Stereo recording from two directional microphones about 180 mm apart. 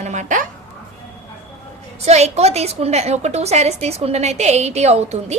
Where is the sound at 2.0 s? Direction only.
35° right (ahead or behind).